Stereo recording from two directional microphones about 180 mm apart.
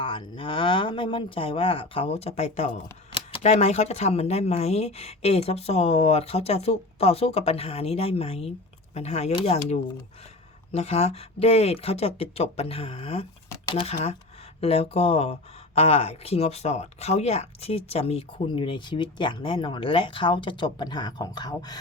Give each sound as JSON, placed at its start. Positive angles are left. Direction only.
{"t": 0.0, "sound": "speech", "side_deg": 30}